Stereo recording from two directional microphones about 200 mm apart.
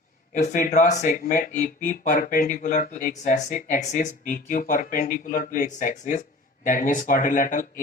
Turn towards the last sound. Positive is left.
turn(degrees=40)  # may be behind; listen again after turning